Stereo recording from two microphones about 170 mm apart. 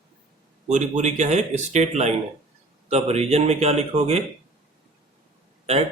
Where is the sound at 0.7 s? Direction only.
45° right (ahead or behind).